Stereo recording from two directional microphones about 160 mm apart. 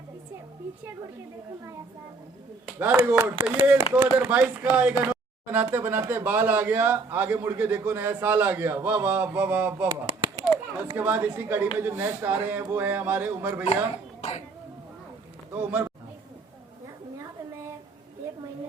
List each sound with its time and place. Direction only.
2.7 s speech: 10° right (ahead or behind)
9.9 s a sound: 30° right (ahead or behind)
10.9 s speech: 10° right (ahead or behind)
14.2 s cough: 45° left (ahead or behind)
15.5 s speech: 15° right (ahead or behind)